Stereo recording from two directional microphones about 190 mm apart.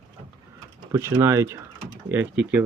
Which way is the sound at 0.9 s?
15° right (ahead or behind).